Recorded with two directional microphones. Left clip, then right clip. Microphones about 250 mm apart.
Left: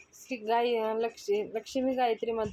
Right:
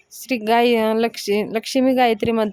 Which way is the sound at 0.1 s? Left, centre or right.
Right.